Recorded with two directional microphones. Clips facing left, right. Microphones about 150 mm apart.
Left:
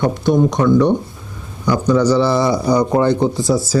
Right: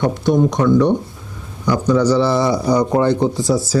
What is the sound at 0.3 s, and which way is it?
Speech, 25° left (ahead or behind).